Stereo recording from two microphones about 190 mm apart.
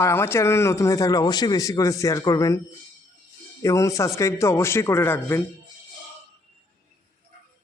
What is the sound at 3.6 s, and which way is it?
Speech, 15° left (ahead or behind).